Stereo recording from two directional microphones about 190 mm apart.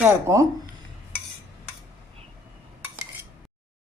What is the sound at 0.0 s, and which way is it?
Speech, 15° right (ahead or behind).